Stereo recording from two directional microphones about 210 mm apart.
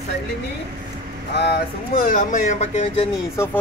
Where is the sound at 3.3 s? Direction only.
10° left (ahead or behind).